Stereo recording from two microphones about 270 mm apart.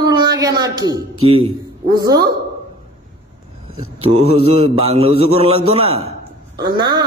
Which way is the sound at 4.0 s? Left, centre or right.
Right.